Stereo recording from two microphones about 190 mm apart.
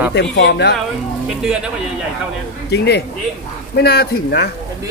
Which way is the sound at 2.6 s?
60° left (ahead or behind).